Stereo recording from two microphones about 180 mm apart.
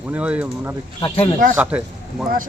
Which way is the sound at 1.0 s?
25° left (ahead or behind).